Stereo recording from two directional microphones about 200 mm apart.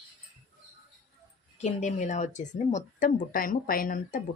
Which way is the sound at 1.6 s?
35° left (ahead or behind).